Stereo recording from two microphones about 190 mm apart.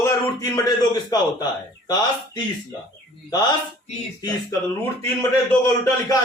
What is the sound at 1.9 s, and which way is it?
Speech, 20° left (ahead or behind).